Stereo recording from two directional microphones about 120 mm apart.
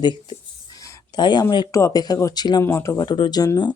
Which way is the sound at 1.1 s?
35° left (ahead or behind).